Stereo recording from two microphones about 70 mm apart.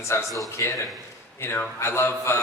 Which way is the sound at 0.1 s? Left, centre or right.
Left.